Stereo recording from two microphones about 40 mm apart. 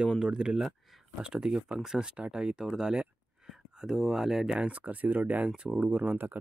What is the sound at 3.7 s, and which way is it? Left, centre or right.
Speech, centre.